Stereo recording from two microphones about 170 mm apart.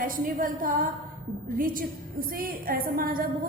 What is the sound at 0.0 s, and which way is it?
A woman's voice, 50° right (ahead or behind).